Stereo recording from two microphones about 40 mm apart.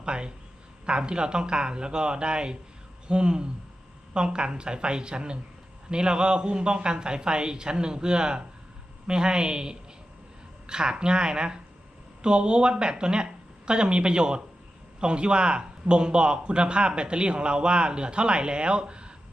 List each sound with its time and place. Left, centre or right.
0.0 s a man's voice: right